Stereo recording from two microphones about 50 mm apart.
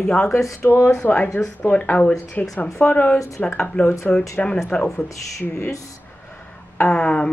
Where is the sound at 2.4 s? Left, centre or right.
Left.